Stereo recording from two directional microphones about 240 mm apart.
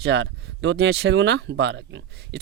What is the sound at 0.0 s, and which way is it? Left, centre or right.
Speech, right.